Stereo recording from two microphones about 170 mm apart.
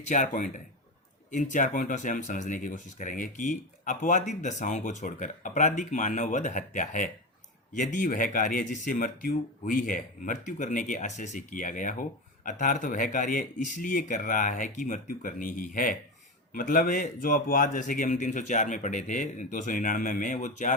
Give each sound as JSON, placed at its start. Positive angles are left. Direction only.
{"t": 0.1, "sound": "speech", "side_deg": 50}